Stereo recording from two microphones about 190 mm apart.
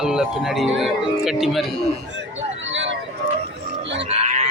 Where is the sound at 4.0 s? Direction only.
35° right (ahead or behind).